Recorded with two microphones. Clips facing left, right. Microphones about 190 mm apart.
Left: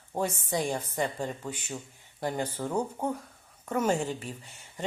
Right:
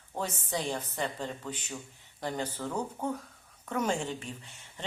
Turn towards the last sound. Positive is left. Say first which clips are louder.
# left 6 dB
turn(degrees=5)  # may be behind; listen again after turning